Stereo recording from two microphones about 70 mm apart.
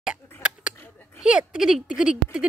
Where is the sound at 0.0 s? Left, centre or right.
Centre.